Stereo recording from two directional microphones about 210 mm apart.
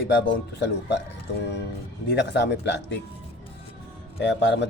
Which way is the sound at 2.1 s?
55° left (ahead or behind).